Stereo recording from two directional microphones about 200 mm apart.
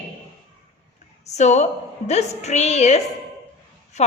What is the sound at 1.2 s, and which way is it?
A woman's voice, 35° left (ahead or behind).